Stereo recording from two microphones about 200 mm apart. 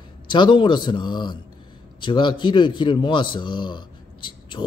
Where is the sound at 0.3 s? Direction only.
25° left (ahead or behind).